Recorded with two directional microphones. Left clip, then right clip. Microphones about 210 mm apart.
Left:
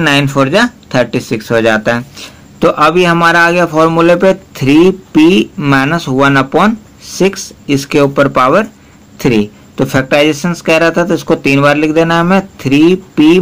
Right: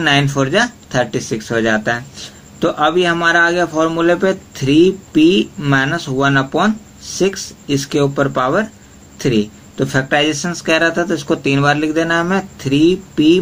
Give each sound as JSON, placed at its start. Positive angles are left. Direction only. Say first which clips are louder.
{"t": 0.0, "sound": "speech", "louder": "left 4 dB", "side_deg": 35}